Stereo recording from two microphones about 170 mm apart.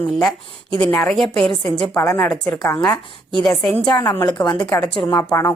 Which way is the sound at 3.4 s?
5° left (ahead or behind).